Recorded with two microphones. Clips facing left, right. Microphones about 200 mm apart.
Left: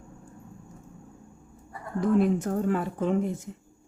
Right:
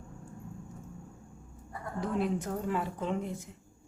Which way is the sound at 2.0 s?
50° left (ahead or behind).